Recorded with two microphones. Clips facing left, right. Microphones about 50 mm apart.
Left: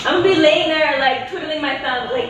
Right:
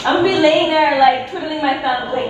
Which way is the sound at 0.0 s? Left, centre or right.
Left.